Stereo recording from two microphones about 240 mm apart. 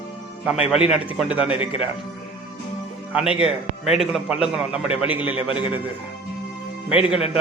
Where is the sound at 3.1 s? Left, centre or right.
Centre.